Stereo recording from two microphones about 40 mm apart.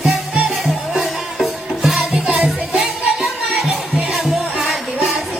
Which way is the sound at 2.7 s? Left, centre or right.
Centre.